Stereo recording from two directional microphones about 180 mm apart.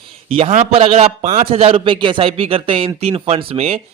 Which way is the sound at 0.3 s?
35° right (ahead or behind).